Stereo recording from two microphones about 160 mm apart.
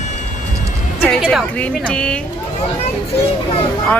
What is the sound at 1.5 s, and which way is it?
Speech, 10° left (ahead or behind).